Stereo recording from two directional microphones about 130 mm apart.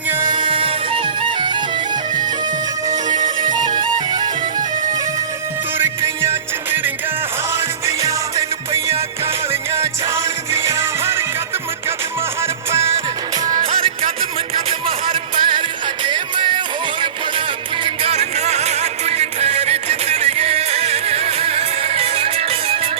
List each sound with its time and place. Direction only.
0.3 s music: 40° right (ahead or behind)
3.1 s music: 85° right
3.5 s music: 35° right (ahead or behind)
5.7 s music: 20° right (ahead or behind)
12.4 s music: 20° right (ahead or behind)
13.6 s music: 50° right (ahead or behind)
17.8 s music: 50° right (ahead or behind)